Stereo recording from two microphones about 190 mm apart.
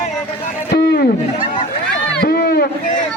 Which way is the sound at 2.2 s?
55° left (ahead or behind).